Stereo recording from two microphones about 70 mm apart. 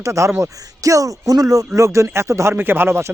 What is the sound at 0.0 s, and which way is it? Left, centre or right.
Speech, right.